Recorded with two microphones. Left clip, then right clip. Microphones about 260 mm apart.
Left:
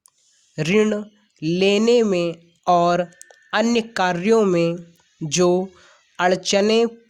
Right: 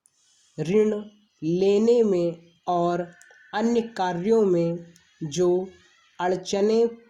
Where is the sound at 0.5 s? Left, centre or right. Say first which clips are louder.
Left 3 dB; left.